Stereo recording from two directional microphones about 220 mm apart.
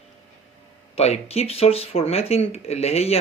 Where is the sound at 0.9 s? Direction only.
30° left (ahead or behind).